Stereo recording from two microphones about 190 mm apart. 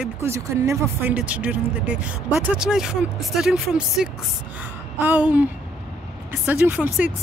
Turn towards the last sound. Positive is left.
turn(degrees=-5)  # may be behind; listen again after turning